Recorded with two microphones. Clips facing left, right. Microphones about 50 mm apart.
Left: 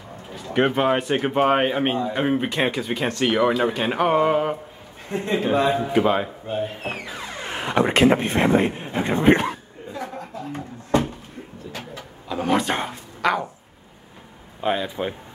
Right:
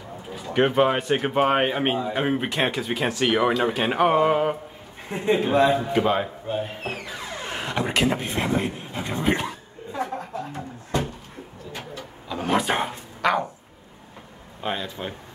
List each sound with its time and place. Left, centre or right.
0.5 s speech: centre
7.1 s music: centre
7.8 s speech: left
12.3 s a sound: centre
14.6 s speech: centre